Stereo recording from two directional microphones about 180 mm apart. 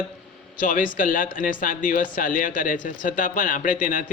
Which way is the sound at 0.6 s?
50° left (ahead or behind).